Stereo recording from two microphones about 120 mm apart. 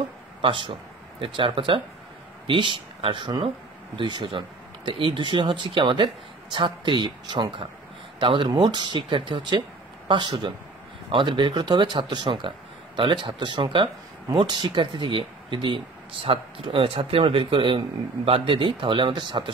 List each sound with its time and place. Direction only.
0.4 s speech: 45° right (ahead or behind)